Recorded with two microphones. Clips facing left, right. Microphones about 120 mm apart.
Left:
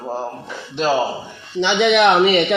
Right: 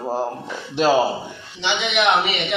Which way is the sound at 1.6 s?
50° left (ahead or behind).